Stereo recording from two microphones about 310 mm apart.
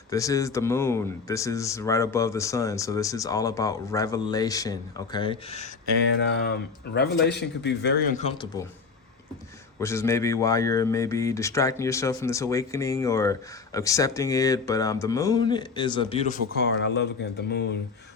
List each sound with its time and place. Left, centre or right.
0.1 s speech: centre
6.1 s speech: left
8.2 s speech: centre
9.8 s speech: centre
16.8 s speech: left